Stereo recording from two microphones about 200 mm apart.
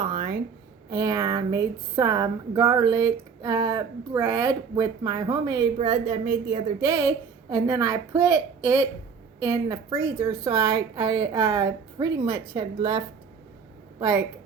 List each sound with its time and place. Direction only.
0.0 s a sound: 25° right (ahead or behind)
0.9 s a woman's voice: 20° right (ahead or behind)
7.5 s a woman's voice: 15° right (ahead or behind)